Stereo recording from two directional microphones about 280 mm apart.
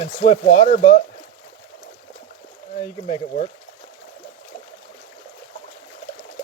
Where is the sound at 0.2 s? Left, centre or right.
Left.